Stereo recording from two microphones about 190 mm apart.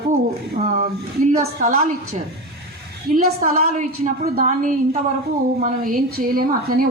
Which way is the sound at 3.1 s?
45° right (ahead or behind).